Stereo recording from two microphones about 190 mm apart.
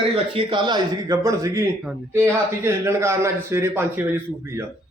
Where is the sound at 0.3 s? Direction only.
25° right (ahead or behind).